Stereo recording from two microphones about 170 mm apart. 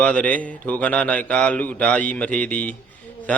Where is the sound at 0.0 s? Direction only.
10° left (ahead or behind).